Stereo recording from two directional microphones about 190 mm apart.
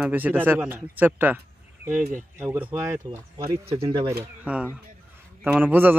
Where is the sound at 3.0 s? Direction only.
20° right (ahead or behind).